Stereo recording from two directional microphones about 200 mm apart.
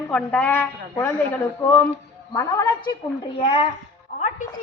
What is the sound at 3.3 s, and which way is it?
Speech, 30° left (ahead or behind).